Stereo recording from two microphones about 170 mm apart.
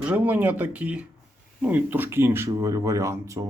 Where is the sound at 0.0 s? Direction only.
10° right (ahead or behind).